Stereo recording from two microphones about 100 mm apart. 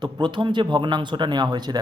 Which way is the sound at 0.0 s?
50° right (ahead or behind).